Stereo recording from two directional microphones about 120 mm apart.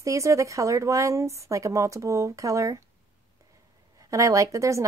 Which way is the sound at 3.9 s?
25° right (ahead or behind).